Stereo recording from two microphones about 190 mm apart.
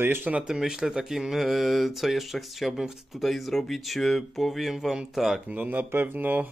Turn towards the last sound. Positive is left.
turn(degrees=-10)  # may be behind; listen again after turning